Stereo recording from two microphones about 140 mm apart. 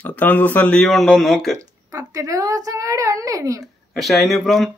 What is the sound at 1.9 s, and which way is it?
A woman's voice, 25° right (ahead or behind).